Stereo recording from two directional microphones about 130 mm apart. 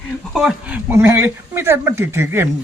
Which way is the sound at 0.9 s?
20° right (ahead or behind).